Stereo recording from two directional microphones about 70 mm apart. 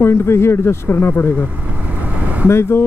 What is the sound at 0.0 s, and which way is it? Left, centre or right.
Speech, left.